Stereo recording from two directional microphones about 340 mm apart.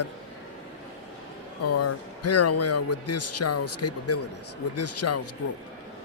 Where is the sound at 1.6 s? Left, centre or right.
Left.